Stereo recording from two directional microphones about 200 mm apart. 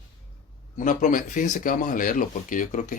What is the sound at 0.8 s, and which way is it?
Speech, 40° left (ahead or behind).